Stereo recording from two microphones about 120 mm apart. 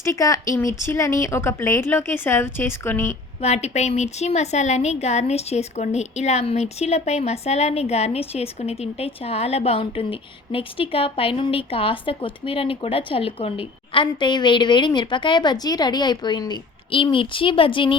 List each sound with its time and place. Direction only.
0.0 s a woman's voice: 25° left (ahead or behind)
3.4 s a woman's voice: 65° left (ahead or behind); by 17.9 s 45° left (ahead or behind)